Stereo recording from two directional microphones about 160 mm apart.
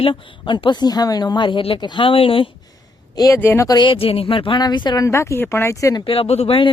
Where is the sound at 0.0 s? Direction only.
30° left (ahead or behind).